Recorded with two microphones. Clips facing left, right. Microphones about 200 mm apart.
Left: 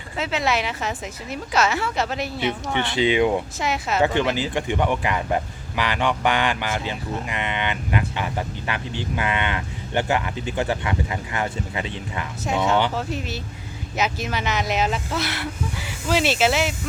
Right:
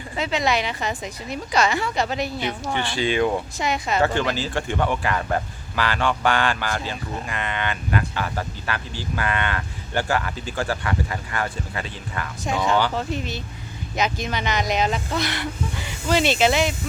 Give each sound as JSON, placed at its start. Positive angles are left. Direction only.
{"t": 0.2, "sound": "speech", "side_deg": 5}
{"t": 2.8, "sound": "speech", "side_deg": 20}
{"t": 3.6, "sound": "speech", "side_deg": 5}
{"t": 4.0, "sound": "speech", "side_deg": 20}
{"t": 12.5, "sound": "speech", "side_deg": 5}